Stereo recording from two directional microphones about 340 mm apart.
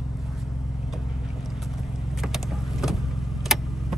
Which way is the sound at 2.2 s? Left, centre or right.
Centre.